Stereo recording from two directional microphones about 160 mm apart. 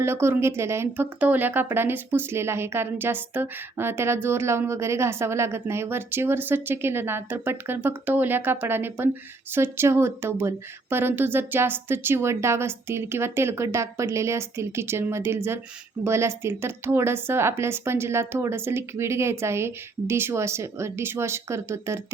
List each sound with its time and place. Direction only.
0.0 s speech: 15° right (ahead or behind)